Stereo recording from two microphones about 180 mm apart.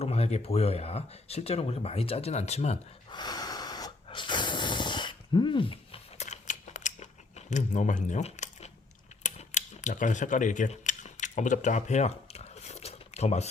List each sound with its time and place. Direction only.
0.0 s speech: 35° left (ahead or behind)
3.1 s a sound: 25° left (ahead or behind); by 8.7 s 40° left (ahead or behind)
9.2 s camera: 40° left (ahead or behind)